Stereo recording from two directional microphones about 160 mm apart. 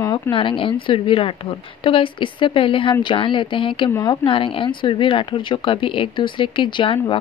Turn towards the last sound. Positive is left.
turn(degrees=30)  # may be behind; listen again after turning